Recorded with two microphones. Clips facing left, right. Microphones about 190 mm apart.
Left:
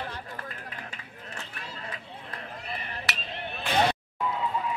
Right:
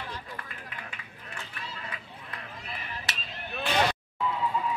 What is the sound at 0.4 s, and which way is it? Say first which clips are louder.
Run: left 3 dB; 40° left (ahead or behind).